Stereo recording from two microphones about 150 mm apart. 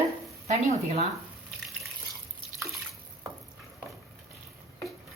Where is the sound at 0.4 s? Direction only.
45° right (ahead or behind).